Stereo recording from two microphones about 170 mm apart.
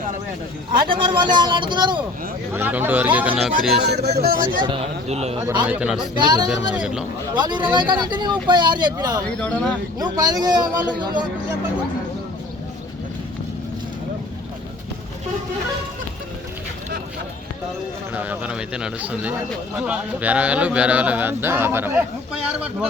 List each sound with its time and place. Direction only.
0.9 s speech: 30° right (ahead or behind)
2.5 s speech: 10° right (ahead or behind)
3.8 s speech: 75° right (ahead or behind); by 4.6 s 55° right (ahead or behind)
4.6 s speech: 30° right (ahead or behind)
5.6 s a man's voice: 5° right (ahead or behind)
6.0 s speech: 25° right (ahead or behind)
6.7 s a man's voice: 5° right (ahead or behind)
7.3 s speech: 25° right (ahead or behind)
9.4 s a man's voice: 5° left (ahead or behind)
10.0 s speech: 25° right (ahead or behind)
18.1 s speech: 10° right (ahead or behind)